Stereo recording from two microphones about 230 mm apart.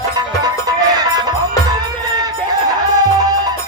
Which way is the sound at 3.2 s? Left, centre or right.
Centre.